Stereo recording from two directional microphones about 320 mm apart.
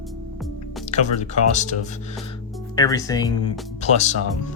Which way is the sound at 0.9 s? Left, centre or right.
Left.